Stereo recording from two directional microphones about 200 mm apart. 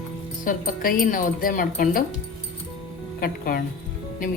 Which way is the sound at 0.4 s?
45° left (ahead or behind).